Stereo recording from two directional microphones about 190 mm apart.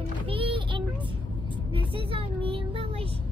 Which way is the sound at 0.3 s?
30° right (ahead or behind).